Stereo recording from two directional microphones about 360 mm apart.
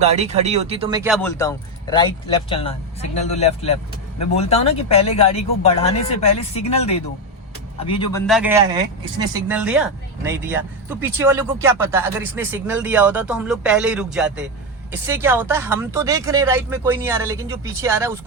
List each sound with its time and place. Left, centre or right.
0.0 s speech: centre
1.1 s speech: centre
8.3 s speech: centre